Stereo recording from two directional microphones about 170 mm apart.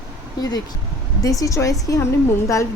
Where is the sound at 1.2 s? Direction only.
20° left (ahead or behind).